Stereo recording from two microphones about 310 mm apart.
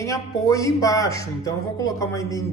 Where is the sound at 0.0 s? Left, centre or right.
Centre.